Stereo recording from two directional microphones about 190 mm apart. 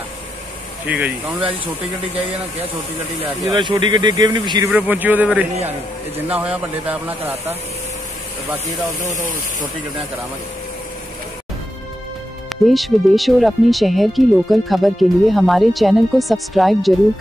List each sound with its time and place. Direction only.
0.8 s speech: 10° right (ahead or behind)
3.5 s speech: 25° right (ahead or behind)
4.7 s speech: 10° right (ahead or behind)
12.6 s speech: centre (ahead or behind)